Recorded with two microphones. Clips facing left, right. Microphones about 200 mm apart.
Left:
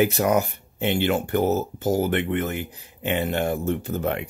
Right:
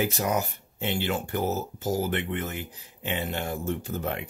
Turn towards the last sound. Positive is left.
turn(degrees=60)  # may be behind; listen again after turning